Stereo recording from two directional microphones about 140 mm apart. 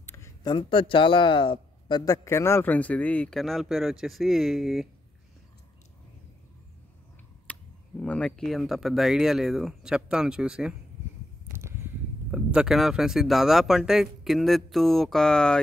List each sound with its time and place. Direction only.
0.0 s a sound: 20° left (ahead or behind)
0.4 s speech: 30° left (ahead or behind)
2.2 s speech: 20° left (ahead or behind); by 4.8 s centre (ahead or behind)
7.5 s a sound: 10° left (ahead or behind)
8.0 s speech: 5° left (ahead or behind)
11.5 s speech: 15° right (ahead or behind); by 15.6 s 5° left (ahead or behind)